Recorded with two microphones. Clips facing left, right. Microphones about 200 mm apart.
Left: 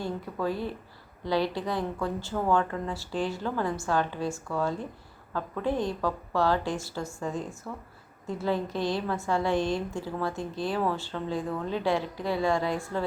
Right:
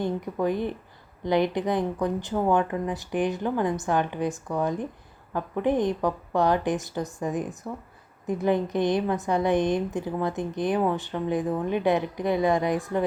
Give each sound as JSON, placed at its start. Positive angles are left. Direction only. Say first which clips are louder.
{"t": 0.0, "sound": "a woman's voice", "louder": "right 5 dB", "side_deg": -20}